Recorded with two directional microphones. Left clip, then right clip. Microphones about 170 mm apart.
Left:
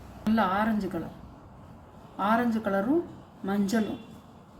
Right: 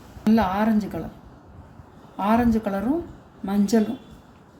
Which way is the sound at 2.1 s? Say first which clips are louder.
Right 4 dB; 50° right (ahead or behind).